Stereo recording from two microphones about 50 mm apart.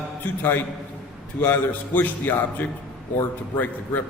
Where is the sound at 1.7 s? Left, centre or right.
Left.